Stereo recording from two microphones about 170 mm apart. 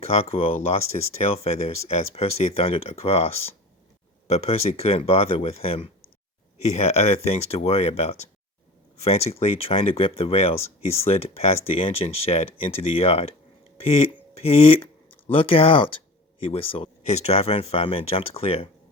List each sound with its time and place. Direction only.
0.0 s speech: 40° left (ahead or behind)